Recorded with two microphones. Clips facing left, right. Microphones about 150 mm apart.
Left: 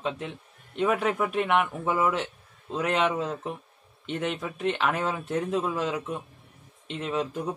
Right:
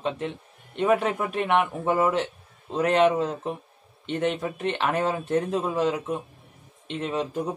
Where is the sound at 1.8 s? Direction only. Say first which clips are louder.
Right 3 dB; 40° right (ahead or behind).